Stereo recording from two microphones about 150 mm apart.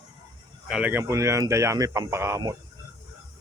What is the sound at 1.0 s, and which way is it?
Speech, 20° right (ahead or behind).